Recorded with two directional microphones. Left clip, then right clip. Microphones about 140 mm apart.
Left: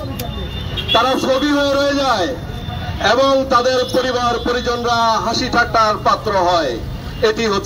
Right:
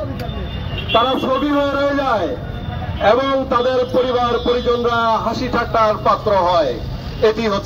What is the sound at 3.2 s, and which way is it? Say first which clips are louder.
A man's voice: left 3 dB; 50° right (ahead or behind).